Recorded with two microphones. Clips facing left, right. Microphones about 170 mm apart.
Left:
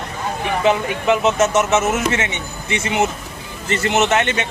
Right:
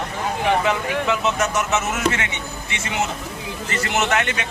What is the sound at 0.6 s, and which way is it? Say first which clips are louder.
A man's voice: left 4 dB; 20° left (ahead or behind).